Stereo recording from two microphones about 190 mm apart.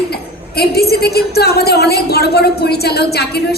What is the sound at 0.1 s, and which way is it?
A woman's voice, 55° left (ahead or behind).